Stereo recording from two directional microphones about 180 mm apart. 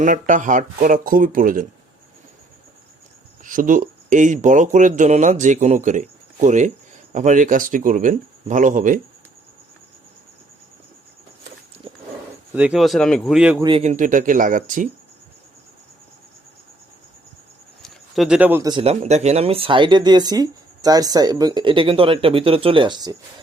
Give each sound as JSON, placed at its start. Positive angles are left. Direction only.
{"t": 0.0, "sound": "speech", "side_deg": -45}
{"t": 3.4, "sound": "speech", "side_deg": -45}
{"t": 12.5, "sound": "speech", "side_deg": -5}
{"t": 13.6, "sound": "speech", "side_deg": -25}
{"t": 13.8, "sound": "speech", "side_deg": -45}
{"t": 17.8, "sound": "a man's voice", "side_deg": 0}
{"t": 18.7, "sound": "speech", "side_deg": -35}